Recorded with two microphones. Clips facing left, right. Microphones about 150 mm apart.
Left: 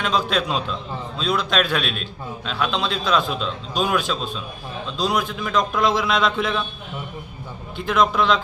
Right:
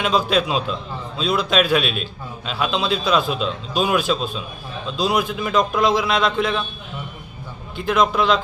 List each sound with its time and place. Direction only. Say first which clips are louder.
0.0 s a man's voice: right 3 dB; 5° right (ahead or behind)
7.8 s a man's voice: right 1 dB; centre (ahead or behind)